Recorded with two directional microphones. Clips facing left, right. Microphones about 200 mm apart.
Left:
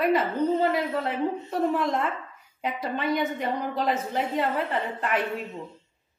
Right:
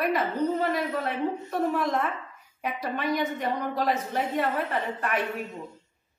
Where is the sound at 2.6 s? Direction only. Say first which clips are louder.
Left 1 dB; 25° left (ahead or behind).